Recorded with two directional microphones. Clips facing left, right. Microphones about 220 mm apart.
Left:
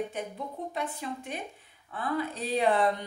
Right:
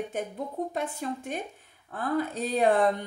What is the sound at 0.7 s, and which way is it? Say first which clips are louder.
A woman's voice: right 3 dB; 45° right (ahead or behind).